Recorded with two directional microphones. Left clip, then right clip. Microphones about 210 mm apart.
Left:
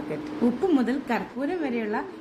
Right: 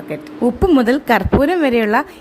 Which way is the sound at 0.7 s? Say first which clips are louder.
Right 12 dB; 45° right (ahead or behind).